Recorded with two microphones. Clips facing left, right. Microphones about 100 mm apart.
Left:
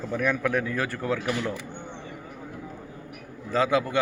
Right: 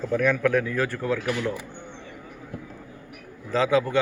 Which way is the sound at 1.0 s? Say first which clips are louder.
Right 1 dB; 20° left (ahead or behind).